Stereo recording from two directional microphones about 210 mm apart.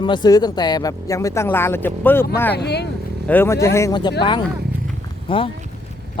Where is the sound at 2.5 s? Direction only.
50° left (ahead or behind).